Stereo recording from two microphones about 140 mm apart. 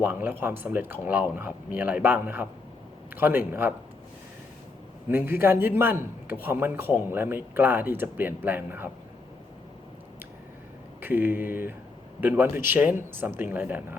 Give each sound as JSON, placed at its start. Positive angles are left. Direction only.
{"t": 0.0, "sound": "speech", "side_deg": -15}
{"t": 5.0, "sound": "speech", "side_deg": -15}
{"t": 11.0, "sound": "speech", "side_deg": -15}